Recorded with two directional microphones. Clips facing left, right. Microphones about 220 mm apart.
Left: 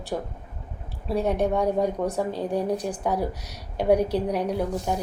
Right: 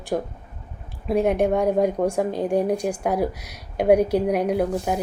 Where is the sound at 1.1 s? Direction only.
15° right (ahead or behind).